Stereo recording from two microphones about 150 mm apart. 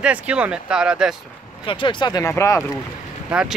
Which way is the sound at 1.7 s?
35° left (ahead or behind).